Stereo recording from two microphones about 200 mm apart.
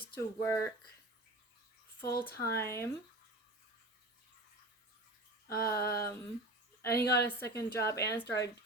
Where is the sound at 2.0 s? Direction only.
50° left (ahead or behind).